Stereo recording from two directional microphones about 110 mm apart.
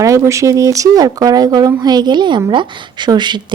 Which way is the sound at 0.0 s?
30° right (ahead or behind).